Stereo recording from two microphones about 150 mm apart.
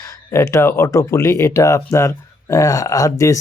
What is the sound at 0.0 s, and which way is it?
Speech, 20° left (ahead or behind).